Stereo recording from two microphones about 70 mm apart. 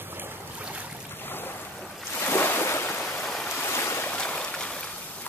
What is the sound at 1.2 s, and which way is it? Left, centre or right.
Boat, left.